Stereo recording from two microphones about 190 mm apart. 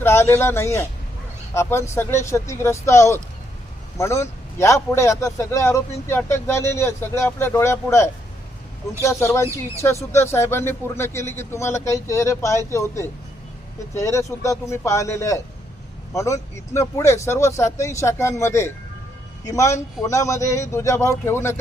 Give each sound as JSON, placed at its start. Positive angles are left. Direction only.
{"t": 0.0, "sound": "a man's voice", "side_deg": 15}